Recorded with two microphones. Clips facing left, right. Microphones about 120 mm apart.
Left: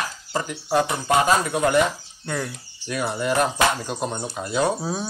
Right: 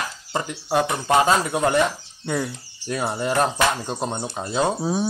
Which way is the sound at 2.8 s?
30° right (ahead or behind).